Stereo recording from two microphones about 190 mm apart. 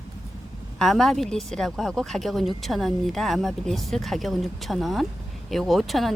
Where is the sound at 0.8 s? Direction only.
Centre (ahead or behind).